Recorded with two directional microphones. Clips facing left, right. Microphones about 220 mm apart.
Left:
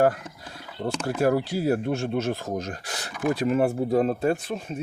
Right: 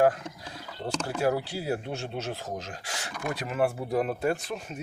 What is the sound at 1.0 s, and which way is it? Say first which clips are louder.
Speech: left 5 dB; 50° left (ahead or behind).